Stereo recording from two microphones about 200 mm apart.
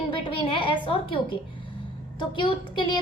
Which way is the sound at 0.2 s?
25° left (ahead or behind).